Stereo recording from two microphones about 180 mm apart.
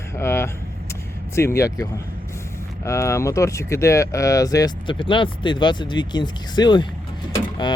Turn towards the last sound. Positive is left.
turn(degrees=25)  # may be behind; listen again after turning